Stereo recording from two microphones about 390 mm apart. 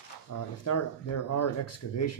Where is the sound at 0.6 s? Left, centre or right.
Left.